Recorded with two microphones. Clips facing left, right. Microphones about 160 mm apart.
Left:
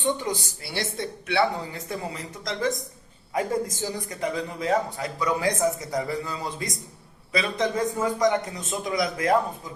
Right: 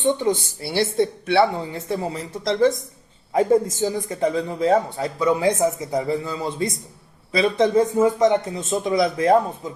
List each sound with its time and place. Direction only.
0.0 s speech: 25° right (ahead or behind)